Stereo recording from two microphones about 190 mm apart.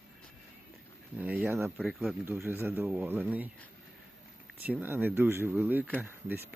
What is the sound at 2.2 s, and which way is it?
Speech, 15° right (ahead or behind).